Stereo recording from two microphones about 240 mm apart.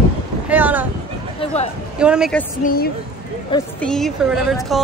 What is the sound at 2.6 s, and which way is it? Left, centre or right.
Speech, left.